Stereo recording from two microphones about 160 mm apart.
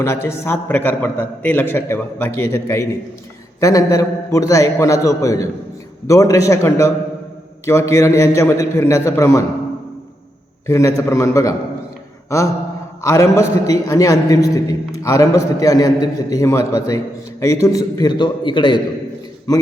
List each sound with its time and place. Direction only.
0.0 s a man's voice: 15° left (ahead or behind)
10.7 s a man's voice: 20° left (ahead or behind)
13.0 s a man's voice: 20° left (ahead or behind)